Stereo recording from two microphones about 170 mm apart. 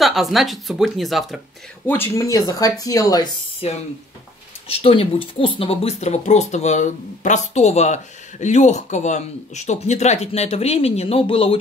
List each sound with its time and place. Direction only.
0.0 s speech: centre (ahead or behind)
1.9 s speech: 15° left (ahead or behind)
3.6 s speech: 35° left (ahead or behind)